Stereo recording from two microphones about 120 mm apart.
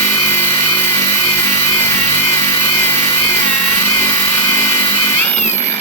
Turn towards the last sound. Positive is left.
turn(degrees=20)  # may be behind; listen again after turning